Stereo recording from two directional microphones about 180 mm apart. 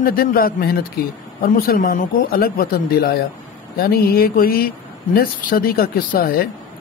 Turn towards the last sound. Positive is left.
turn(degrees=55)  # may be behind; listen again after turning